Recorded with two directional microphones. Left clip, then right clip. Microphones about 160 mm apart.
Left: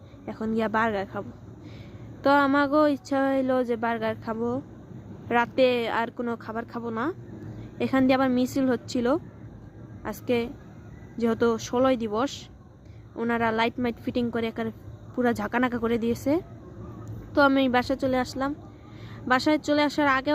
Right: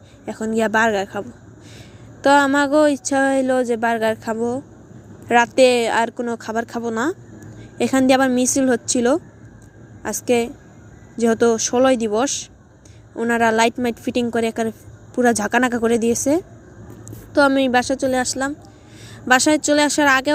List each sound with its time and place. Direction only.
0.3 s speech: 10° right (ahead or behind)
2.2 s a woman's voice: 15° right (ahead or behind)